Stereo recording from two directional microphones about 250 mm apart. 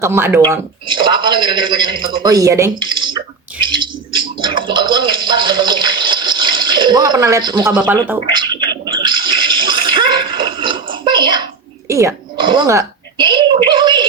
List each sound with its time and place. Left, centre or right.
0.0 s speech: centre
3.6 s bird: centre
4.4 s water: centre
7.9 s a sound: centre